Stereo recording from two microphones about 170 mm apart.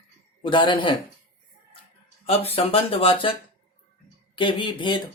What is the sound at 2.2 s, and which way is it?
Speech, 35° left (ahead or behind).